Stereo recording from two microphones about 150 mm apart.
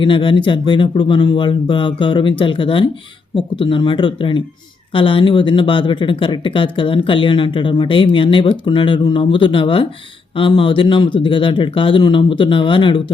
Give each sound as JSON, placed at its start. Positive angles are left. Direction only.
{"t": 0.0, "sound": "speech", "side_deg": 35}